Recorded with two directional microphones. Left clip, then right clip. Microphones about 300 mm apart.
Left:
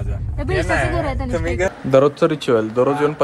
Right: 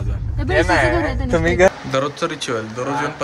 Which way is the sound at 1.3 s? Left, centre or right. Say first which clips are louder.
Right 10 dB; right.